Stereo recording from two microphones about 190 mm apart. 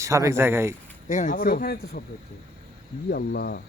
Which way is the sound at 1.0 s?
40° left (ahead or behind).